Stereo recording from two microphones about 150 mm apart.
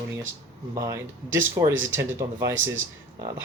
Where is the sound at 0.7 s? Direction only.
25° right (ahead or behind).